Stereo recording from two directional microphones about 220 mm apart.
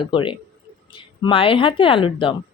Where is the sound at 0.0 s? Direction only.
20° left (ahead or behind).